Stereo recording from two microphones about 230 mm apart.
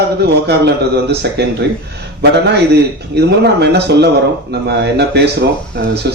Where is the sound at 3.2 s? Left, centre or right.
Right.